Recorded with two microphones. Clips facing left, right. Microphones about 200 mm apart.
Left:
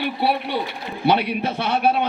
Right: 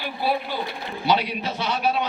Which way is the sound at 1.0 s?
60° left (ahead or behind).